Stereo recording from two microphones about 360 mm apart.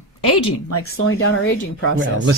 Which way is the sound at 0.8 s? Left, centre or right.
Left.